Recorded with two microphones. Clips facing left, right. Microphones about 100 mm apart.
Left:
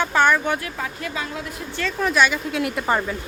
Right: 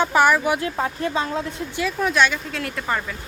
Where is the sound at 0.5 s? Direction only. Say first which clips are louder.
Right 5 dB; 30° right (ahead or behind).